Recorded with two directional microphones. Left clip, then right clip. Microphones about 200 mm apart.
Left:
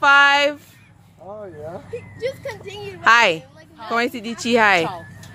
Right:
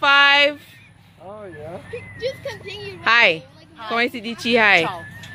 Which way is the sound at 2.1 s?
35° left (ahead or behind).